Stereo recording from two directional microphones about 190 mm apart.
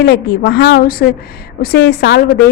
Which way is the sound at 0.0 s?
60° left (ahead or behind).